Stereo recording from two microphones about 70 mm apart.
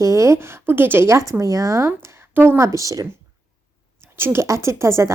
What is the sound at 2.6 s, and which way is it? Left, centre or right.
Speech, right.